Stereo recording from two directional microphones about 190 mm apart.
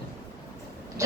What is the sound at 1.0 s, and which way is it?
Oink, 15° right (ahead or behind).